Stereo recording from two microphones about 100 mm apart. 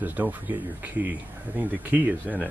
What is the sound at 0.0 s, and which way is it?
Speech, 15° right (ahead or behind).